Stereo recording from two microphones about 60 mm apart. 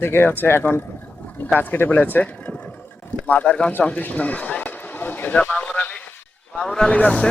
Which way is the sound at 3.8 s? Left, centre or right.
Left.